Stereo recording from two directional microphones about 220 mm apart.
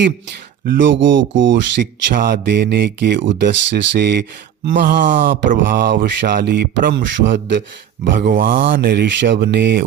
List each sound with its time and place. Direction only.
0.6 s speech: 50° right (ahead or behind)
2.1 s speech: 45° right (ahead or behind)
8.1 s speech: 40° right (ahead or behind)